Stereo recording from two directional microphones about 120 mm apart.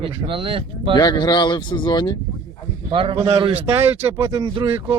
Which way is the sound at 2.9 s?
50° right (ahead or behind).